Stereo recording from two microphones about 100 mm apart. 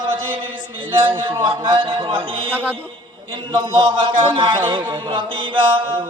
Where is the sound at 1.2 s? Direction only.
60° right (ahead or behind).